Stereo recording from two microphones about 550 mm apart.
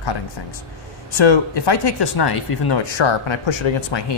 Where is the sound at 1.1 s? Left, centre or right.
Left.